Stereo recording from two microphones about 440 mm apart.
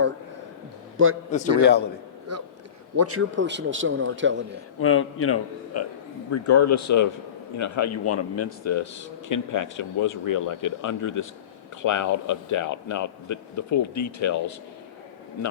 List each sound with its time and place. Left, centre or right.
1.3 s a man's voice: centre
2.3 s a man's voice: right
4.8 s a man's voice: left